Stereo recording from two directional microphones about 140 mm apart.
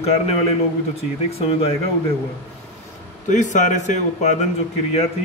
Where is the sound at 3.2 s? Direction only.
60° left (ahead or behind).